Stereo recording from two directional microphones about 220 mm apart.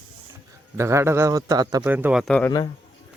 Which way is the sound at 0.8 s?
15° right (ahead or behind).